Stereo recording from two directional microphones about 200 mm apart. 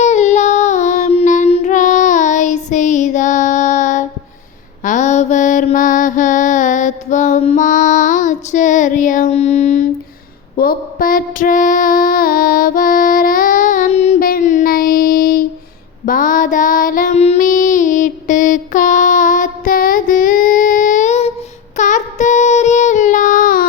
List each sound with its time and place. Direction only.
0.0 s child singing: 35° left (ahead or behind)
4.8 s mantra: 40° left (ahead or behind)
10.6 s child singing: 45° left (ahead or behind)